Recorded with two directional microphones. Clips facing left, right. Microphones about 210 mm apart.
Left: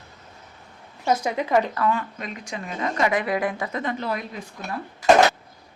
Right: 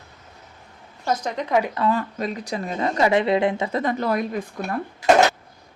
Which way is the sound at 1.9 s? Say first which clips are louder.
Right 4 dB; 35° right (ahead or behind).